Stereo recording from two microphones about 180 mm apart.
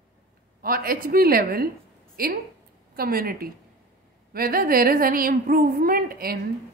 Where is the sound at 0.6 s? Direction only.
55° right (ahead or behind).